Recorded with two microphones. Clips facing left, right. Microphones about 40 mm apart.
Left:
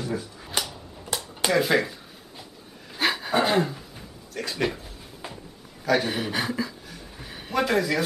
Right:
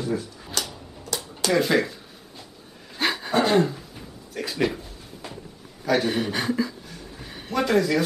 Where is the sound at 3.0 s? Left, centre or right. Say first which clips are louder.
Right 1 dB; centre.